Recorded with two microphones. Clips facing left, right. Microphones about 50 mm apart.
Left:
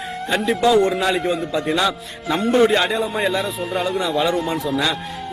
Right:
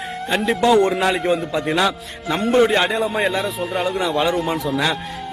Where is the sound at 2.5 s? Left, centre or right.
Centre.